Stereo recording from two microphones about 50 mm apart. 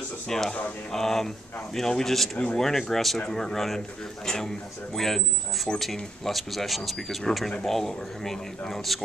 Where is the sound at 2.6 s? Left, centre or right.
Centre.